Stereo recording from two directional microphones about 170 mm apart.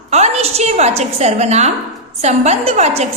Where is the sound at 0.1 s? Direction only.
40° right (ahead or behind).